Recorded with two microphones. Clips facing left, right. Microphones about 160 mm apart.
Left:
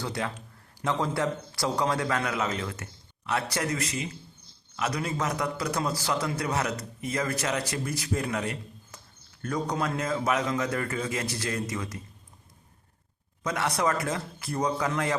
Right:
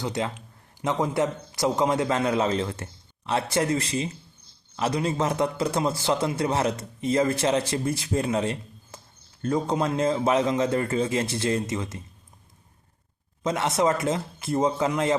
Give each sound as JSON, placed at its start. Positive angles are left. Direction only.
{"t": 0.0, "sound": "a man's voice", "side_deg": -20}
{"t": 13.4, "sound": "a man's voice", "side_deg": -25}